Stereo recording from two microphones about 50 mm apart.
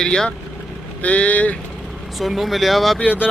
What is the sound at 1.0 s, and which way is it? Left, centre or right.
Speech, left.